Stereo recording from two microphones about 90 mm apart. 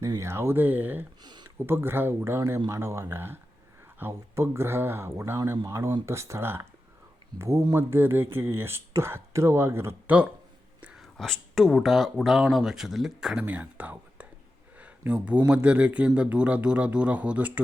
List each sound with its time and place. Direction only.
0.2 s speech: 30° right (ahead or behind)
1.2 s a sound: 55° right (ahead or behind)
1.5 s speech: 25° right (ahead or behind)
10.9 s speech: centre (ahead or behind)
13.4 s speech: 15° right (ahead or behind)
14.8 s a sound: 15° right (ahead or behind)
15.4 s speech: 15° right (ahead or behind)